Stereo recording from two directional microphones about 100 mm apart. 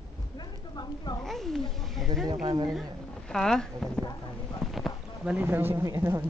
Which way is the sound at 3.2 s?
5° left (ahead or behind).